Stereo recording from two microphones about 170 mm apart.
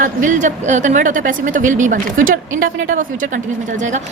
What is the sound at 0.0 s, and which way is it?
A woman's voice, 50° right (ahead or behind).